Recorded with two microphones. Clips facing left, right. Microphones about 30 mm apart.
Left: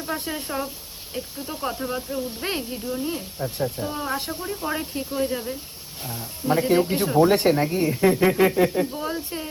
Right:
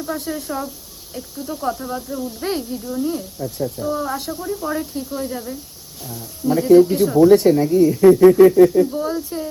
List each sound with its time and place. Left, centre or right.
0.0 s a woman's voice: left
4.1 s a woman's voice: left
6.1 s speech: left
7.2 s speech: left
8.0 s speech: left
8.9 s speech: centre